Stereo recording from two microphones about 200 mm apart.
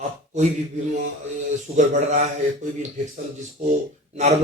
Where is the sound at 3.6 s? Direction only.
40° right (ahead or behind).